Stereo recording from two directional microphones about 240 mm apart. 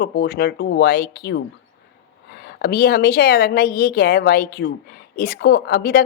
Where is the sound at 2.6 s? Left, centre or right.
Left.